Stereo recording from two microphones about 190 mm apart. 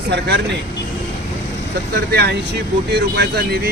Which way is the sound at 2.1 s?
55° right (ahead or behind).